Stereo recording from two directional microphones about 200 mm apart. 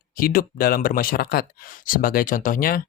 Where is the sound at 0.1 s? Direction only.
45° left (ahead or behind).